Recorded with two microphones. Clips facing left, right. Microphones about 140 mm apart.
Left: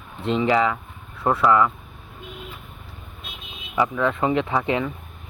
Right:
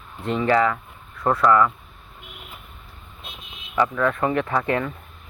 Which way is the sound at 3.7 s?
10° left (ahead or behind).